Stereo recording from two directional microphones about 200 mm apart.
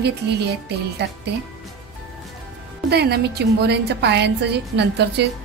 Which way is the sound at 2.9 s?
55° right (ahead or behind).